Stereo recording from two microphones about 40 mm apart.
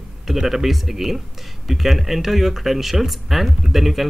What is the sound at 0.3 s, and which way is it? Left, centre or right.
Speech, centre.